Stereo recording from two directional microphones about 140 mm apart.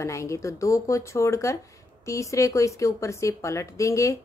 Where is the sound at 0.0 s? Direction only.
20° left (ahead or behind).